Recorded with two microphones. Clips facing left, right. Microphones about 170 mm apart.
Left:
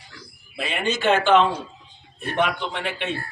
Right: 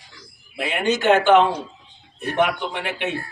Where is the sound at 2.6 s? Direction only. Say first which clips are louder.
Right 2 dB; 10° right (ahead or behind).